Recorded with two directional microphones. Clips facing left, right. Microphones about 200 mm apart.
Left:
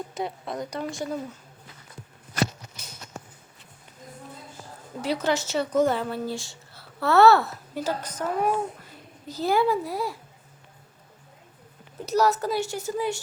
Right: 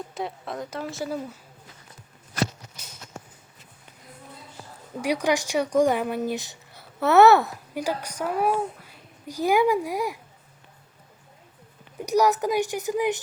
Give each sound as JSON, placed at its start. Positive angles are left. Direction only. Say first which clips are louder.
{"t": 0.1, "sound": "speech", "louder": "left 1 dB", "side_deg": 0}
{"t": 4.9, "sound": "speech", "louder": "right 2 dB", "side_deg": -15}
{"t": 11.9, "sound": "speech", "louder": "right 2 dB", "side_deg": -15}